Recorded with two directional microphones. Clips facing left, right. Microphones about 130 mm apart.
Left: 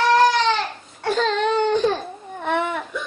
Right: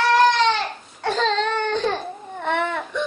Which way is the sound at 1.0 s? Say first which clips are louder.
Left 1 dB; 5° left (ahead or behind).